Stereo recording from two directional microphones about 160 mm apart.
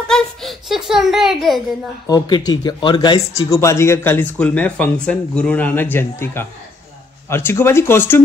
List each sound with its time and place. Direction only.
0.1 s a child's voice: centre (ahead or behind)
2.0 s speech: 25° left (ahead or behind)